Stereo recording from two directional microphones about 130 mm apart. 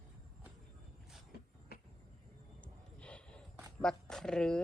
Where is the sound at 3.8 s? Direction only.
5° left (ahead or behind).